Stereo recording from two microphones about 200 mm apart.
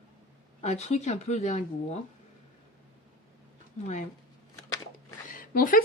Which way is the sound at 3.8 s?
35° left (ahead or behind).